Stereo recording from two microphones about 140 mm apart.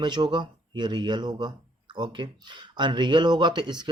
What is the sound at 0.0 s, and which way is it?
Speech, 35° right (ahead or behind).